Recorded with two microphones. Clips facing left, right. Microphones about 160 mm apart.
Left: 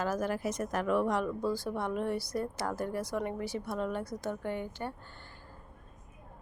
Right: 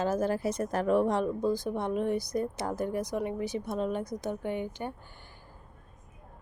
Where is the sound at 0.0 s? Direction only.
25° right (ahead or behind).